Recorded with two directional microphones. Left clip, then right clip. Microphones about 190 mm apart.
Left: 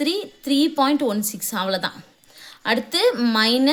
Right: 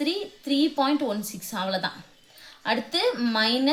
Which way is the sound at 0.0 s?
45° left (ahead or behind).